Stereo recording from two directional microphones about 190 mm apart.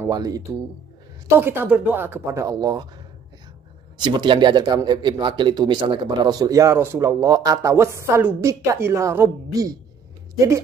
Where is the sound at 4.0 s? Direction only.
25° right (ahead or behind).